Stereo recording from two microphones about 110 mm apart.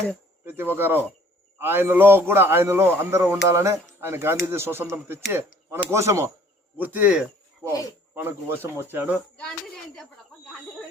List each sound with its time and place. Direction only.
0.4 s a man's voice: 20° right (ahead or behind)